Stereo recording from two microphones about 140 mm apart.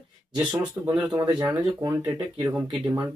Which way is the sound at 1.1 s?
30° right (ahead or behind).